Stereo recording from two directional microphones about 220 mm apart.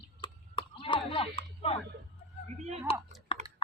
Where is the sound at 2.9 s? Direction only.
25° left (ahead or behind).